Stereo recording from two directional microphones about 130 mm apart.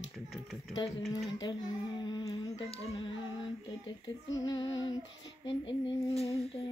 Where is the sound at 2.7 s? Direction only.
50° left (ahead or behind).